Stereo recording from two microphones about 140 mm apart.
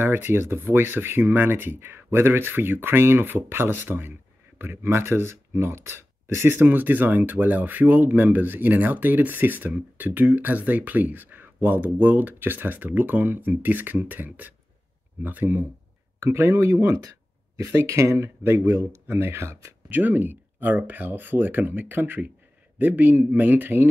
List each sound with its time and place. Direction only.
0.0 s speech: 15° right (ahead or behind)